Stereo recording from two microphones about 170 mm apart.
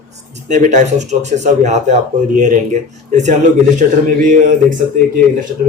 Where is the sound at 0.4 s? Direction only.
45° right (ahead or behind).